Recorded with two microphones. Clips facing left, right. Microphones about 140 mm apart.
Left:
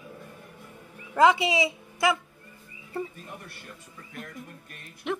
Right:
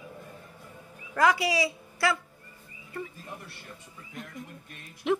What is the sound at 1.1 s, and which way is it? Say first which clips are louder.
Speech: left 4 dB; 20° left (ahead or behind).